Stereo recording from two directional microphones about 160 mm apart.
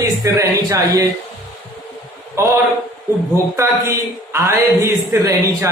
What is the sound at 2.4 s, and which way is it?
A woman's voice, 15° right (ahead or behind).